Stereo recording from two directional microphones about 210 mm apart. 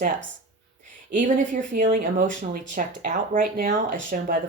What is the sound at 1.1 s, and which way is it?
Speech, 40° right (ahead or behind).